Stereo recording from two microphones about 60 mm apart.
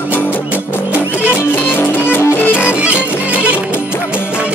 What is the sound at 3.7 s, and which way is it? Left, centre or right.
Music, left.